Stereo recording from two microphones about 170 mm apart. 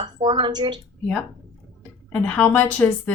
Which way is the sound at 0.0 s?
25° right (ahead or behind).